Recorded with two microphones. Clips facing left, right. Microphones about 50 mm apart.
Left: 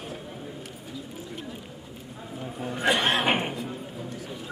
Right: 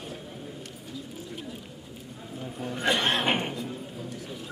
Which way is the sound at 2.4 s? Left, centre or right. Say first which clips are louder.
Left 2 dB; centre.